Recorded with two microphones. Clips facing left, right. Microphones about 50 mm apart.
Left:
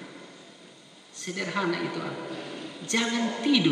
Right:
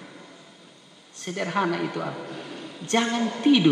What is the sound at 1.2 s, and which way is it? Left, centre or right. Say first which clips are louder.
Speech: right 4 dB; centre.